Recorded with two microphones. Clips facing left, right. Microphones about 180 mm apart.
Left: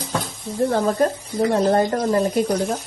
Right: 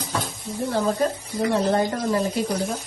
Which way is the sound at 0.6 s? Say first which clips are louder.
Left 4 dB; 50° left (ahead or behind).